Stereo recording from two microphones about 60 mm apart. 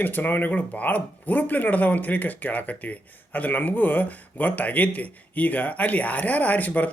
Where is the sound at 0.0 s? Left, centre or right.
Left.